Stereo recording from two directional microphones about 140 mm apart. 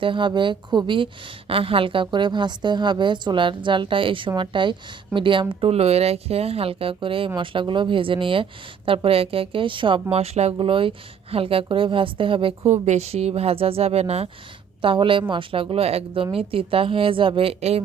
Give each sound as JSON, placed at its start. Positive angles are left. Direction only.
{"t": 0.0, "sound": "a woman's voice", "side_deg": -35}
{"t": 12.8, "sound": "speech", "side_deg": -50}
{"t": 14.8, "sound": "a woman's voice", "side_deg": -40}